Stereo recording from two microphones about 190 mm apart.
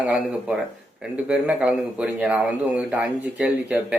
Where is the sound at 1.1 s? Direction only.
5° right (ahead or behind).